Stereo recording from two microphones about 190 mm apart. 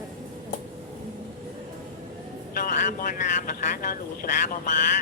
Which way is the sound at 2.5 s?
50° left (ahead or behind).